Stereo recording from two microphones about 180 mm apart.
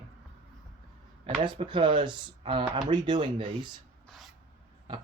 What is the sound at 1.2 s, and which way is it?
Speech, 30° right (ahead or behind).